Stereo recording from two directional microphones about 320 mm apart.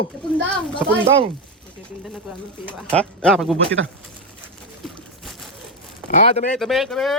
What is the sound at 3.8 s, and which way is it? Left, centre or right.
Speech, right.